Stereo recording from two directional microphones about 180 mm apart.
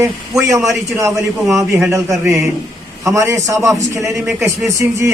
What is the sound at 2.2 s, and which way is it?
A man's voice, 15° right (ahead or behind).